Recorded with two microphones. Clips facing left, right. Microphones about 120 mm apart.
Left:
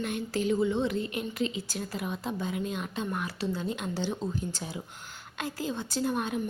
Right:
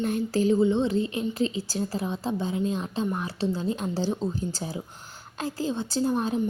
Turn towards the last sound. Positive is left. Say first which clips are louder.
# right 4 dB
turn(degrees=-30)  # may be behind; listen again after turning